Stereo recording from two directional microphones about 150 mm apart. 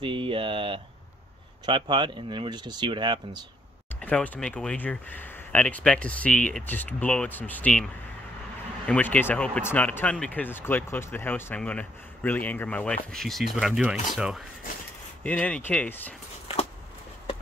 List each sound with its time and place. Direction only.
0.0 s speech: 35° right (ahead or behind)
4.0 s speech: 10° left (ahead or behind)
15.2 s speech: 10° left (ahead or behind)